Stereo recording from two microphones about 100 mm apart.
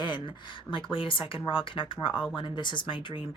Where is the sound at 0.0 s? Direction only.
50° left (ahead or behind).